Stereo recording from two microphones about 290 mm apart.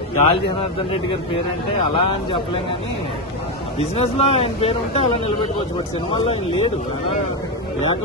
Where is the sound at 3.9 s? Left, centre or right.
Left.